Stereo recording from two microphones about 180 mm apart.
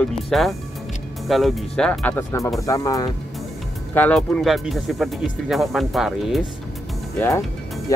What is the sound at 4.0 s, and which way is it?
Speech, 5° left (ahead or behind).